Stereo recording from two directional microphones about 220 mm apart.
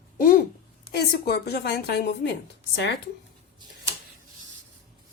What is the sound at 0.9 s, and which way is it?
A woman's voice, 45° left (ahead or behind).